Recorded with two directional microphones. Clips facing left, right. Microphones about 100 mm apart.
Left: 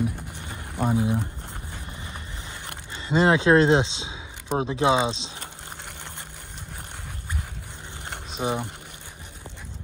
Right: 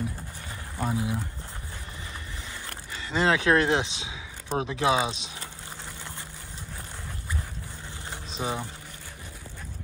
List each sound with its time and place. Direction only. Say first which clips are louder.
0.5 s a sound: left 5 dB; 20° left (ahead or behind)
2.6 s speech: left 1 dB; 20° left (ahead or behind)
8.3 s speech: left 4 dB; 20° left (ahead or behind)